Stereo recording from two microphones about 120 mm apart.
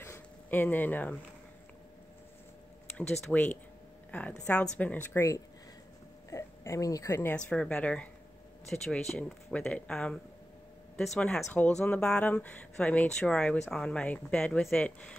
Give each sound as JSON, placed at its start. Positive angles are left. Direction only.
{"t": 0.0, "sound": "a sound", "side_deg": 20}
{"t": 3.0, "sound": "a woman's voice", "side_deg": 10}
{"t": 6.3, "sound": "a woman's voice", "side_deg": 25}
{"t": 7.3, "sound": "speech", "side_deg": 10}